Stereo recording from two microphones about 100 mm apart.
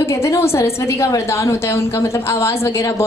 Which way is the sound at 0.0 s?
30° left (ahead or behind).